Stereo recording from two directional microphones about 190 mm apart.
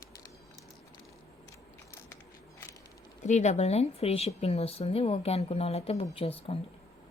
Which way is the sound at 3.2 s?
40° left (ahead or behind).